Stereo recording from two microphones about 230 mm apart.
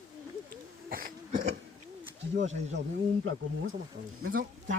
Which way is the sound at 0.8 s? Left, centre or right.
Right.